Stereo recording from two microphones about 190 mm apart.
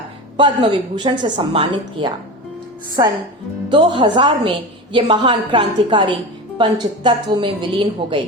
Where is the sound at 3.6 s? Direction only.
25° right (ahead or behind).